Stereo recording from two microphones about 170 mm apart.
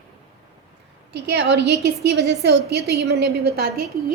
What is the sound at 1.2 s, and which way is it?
A woman's voice, 85° right.